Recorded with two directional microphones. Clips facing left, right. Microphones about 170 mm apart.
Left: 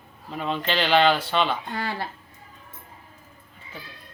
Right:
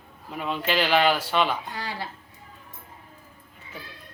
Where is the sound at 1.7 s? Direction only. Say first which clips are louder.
Left 4 dB; 50° left (ahead or behind).